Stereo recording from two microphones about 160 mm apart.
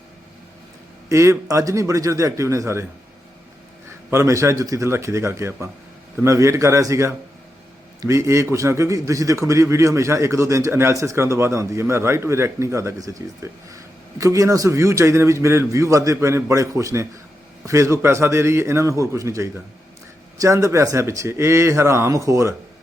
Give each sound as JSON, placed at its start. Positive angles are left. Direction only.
{"t": 1.1, "sound": "a man's voice", "side_deg": -20}
{"t": 4.1, "sound": "a man's voice", "side_deg": -15}